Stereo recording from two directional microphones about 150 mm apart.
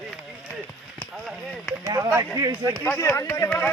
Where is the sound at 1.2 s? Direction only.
Centre (ahead or behind).